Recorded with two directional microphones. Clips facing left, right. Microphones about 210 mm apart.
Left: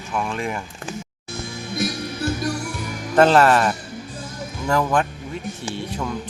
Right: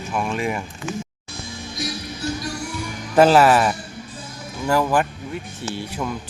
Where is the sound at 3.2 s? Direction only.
5° right (ahead or behind).